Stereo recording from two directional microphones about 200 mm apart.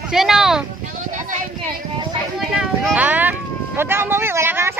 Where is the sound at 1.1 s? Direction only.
40° right (ahead or behind).